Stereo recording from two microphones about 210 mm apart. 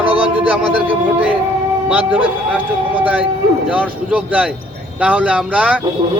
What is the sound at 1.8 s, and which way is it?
Speech, 5° right (ahead or behind).